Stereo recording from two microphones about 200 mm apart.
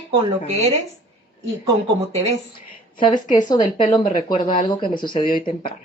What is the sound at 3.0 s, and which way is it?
Speech, 25° left (ahead or behind).